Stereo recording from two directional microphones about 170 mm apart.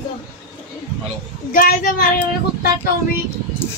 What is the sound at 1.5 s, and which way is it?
Speech, 55° left (ahead or behind).